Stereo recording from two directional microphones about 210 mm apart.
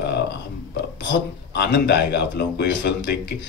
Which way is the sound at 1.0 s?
55° left (ahead or behind).